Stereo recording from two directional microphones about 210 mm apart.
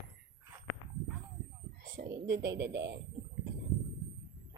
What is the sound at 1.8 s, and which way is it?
A woman's voice, 45° right (ahead or behind).